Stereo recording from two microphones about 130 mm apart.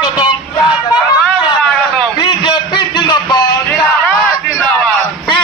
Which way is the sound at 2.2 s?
35° left (ahead or behind).